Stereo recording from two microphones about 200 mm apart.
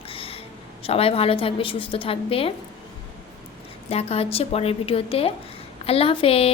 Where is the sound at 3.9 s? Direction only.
30° left (ahead or behind).